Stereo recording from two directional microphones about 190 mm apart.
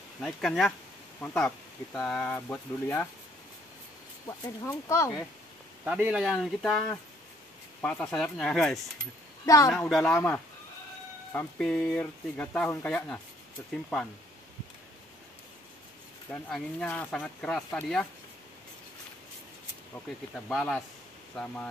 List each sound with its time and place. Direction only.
0.2 s speech: centre (ahead or behind)
4.3 s speech: 15° left (ahead or behind)
5.9 s speech: 5° right (ahead or behind); by 13.7 s 10° left (ahead or behind)
16.3 s speech: 5° left (ahead or behind)
20.4 s speech: 5° left (ahead or behind)